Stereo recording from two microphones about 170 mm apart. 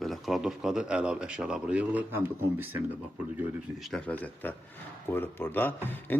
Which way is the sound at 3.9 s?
10° left (ahead or behind).